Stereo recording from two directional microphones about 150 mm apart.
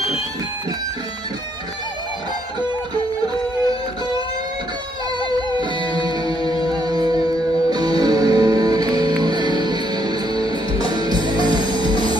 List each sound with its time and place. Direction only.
5.6 s music: 30° right (ahead or behind)